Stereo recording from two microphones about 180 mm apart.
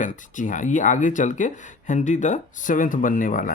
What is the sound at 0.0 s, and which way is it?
A child's voice, 45° left (ahead or behind).